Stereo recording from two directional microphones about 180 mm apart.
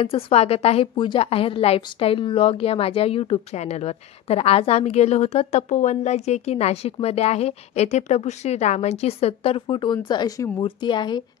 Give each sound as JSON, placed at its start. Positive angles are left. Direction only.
{"t": 0.0, "sound": "a woman's voice", "side_deg": 35}